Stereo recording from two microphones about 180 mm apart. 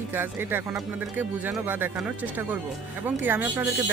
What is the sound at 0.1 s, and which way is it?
Speech, 10° right (ahead or behind).